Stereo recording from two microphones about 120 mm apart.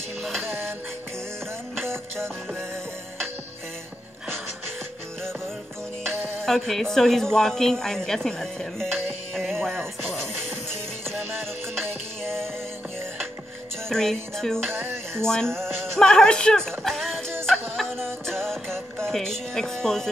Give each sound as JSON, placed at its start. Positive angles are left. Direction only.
{"t": 0.2, "sound": "music", "side_deg": 0}
{"t": 6.2, "sound": "speech", "side_deg": 5}
{"t": 11.8, "sound": "music", "side_deg": 5}
{"t": 13.8, "sound": "music", "side_deg": 5}
{"t": 14.7, "sound": "music", "side_deg": -20}
{"t": 15.2, "sound": "music", "side_deg": 5}